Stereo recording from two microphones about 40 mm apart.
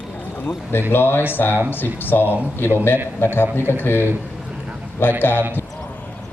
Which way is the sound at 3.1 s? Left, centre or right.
Left.